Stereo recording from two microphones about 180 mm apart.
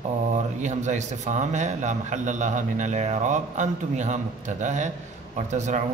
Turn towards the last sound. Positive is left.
turn(degrees=-40)  # may be behind; listen again after turning